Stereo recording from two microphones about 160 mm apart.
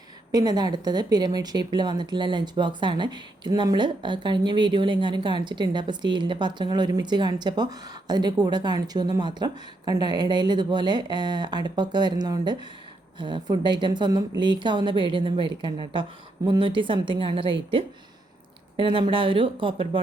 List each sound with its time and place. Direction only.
0.3 s a woman's voice: 25° right (ahead or behind)